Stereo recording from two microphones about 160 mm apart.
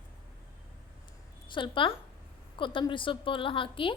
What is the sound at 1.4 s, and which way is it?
A woman's voice, 30° left (ahead or behind).